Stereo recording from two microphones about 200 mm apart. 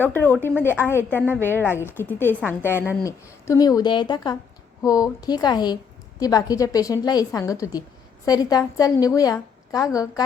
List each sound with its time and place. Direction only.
0.1 s a woman's voice: 10° left (ahead or behind)
1.2 s a woman's voice: 10° right (ahead or behind)
1.5 s a woman's voice: 10° left (ahead or behind)